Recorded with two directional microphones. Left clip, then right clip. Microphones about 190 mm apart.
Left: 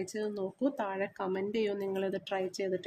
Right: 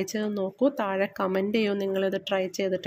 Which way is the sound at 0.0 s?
25° right (ahead or behind).